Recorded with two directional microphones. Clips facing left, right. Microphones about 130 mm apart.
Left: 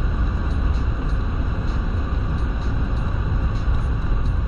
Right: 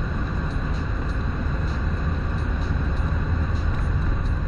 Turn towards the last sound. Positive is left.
turn(degrees=0)  # may be behind; listen again after turning